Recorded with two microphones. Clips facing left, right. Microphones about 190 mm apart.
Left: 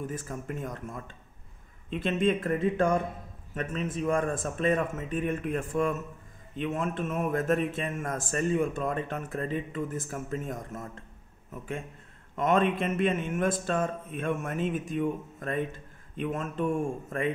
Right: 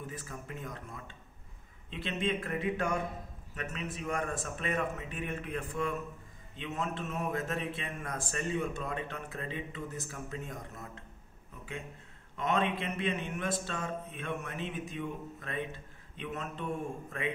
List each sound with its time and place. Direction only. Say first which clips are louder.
0.0 s a man's voice: left 8 dB; 45° left (ahead or behind)
3.5 s a man's voice: left 7 dB; 45° left (ahead or behind)
12.4 s a man's voice: left 6 dB; 50° left (ahead or behind)